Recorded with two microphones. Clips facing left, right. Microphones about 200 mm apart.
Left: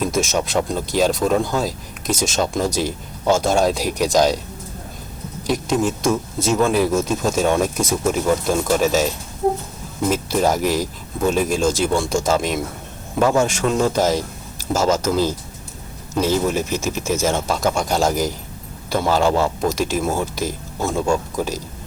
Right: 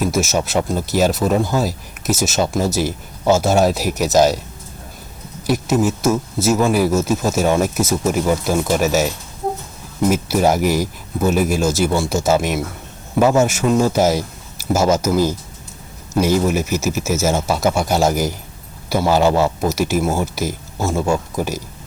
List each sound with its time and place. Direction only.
0.0 s speech: 5° right (ahead or behind)
5.4 s speech: 5° right (ahead or behind)